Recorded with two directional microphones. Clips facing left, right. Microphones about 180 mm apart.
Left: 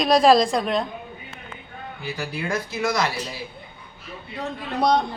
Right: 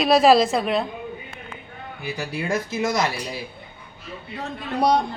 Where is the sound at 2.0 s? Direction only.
20° right (ahead or behind).